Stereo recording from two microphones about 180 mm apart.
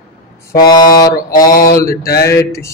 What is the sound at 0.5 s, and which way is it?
Mantra, 20° left (ahead or behind).